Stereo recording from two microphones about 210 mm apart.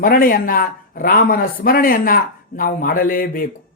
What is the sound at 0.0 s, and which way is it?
A man's voice, 40° left (ahead or behind).